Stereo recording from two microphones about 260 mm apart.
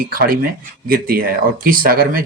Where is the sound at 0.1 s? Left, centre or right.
Right.